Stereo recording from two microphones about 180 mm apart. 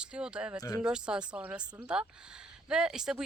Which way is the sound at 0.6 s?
20° left (ahead or behind).